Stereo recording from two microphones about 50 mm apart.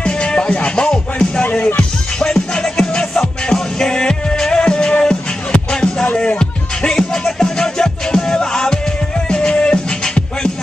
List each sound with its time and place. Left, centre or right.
0.0 s music: centre